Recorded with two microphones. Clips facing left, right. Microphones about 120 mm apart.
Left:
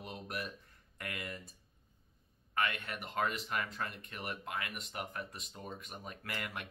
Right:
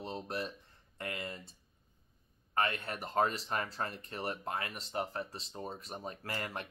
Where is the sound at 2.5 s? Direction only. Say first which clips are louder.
Right 2 dB; 35° right (ahead or behind).